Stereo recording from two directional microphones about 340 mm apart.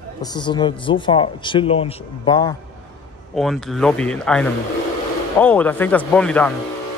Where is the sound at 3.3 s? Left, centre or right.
Centre.